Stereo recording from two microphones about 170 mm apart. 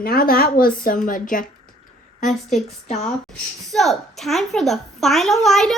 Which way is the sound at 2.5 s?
40° left (ahead or behind).